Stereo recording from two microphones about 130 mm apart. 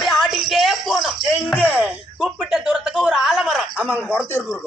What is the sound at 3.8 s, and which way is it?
Speech, 15° right (ahead or behind).